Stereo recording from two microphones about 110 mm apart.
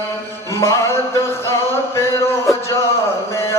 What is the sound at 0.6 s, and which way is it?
Music, 25° left (ahead or behind).